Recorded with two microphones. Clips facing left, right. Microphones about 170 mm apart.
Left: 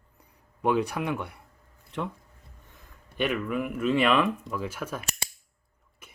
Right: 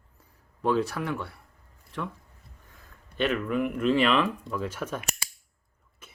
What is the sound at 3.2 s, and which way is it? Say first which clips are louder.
Speech: right 2 dB; 10° left (ahead or behind).